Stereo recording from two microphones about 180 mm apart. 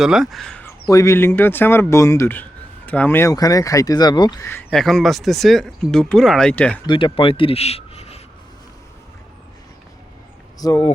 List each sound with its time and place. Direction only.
0.0 s speech: centre (ahead or behind)
0.9 s speech: 15° left (ahead or behind)
4.7 s speech: centre (ahead or behind)
6.8 s a man's voice: 30° left (ahead or behind)
10.6 s speech: 20° left (ahead or behind)